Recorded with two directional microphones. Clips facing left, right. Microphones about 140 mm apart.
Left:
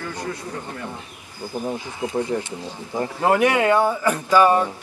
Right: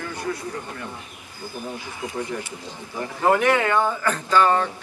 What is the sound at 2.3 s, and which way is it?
Speech, 35° left (ahead or behind).